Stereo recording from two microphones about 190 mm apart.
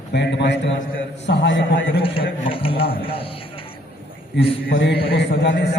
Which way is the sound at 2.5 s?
30° left (ahead or behind).